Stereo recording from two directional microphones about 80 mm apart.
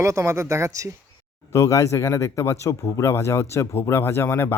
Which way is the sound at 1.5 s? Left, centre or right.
Left.